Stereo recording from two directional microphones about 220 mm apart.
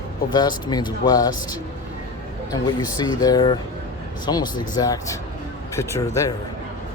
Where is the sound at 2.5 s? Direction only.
15° left (ahead or behind).